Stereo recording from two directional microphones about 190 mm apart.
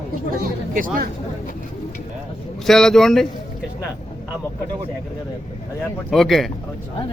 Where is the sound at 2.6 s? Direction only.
Centre (ahead or behind).